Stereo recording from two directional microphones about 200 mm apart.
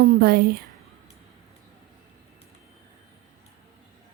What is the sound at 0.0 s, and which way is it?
Speech, 50° right (ahead or behind).